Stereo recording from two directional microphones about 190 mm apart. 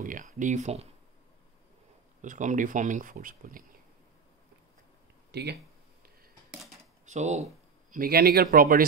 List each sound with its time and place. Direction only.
0.0 s speech: 45° right (ahead or behind)
2.2 s speech: 40° right (ahead or behind)
5.3 s speech: 60° right (ahead or behind)
7.1 s speech: 40° right (ahead or behind)
7.9 s speech: 50° right (ahead or behind)